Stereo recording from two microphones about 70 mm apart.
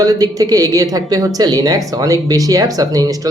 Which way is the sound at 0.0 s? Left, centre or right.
Right.